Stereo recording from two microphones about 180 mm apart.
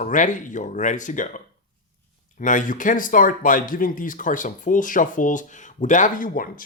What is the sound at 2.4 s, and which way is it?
Speech, 45° left (ahead or behind).